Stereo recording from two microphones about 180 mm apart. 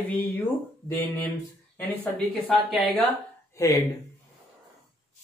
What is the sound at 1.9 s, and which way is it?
Speech, 5° left (ahead or behind).